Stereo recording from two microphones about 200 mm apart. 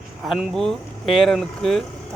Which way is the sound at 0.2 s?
Centre (ahead or behind).